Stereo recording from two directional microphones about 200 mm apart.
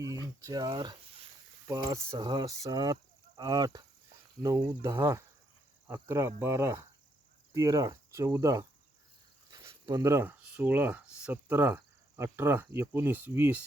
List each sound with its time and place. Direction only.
0.4 s speech: 20° right (ahead or behind)
4.4 s cricket: 15° right (ahead or behind)
9.5 s speech: 20° right (ahead or behind)